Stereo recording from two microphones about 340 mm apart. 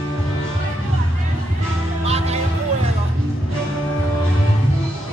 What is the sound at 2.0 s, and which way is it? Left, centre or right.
Music, centre.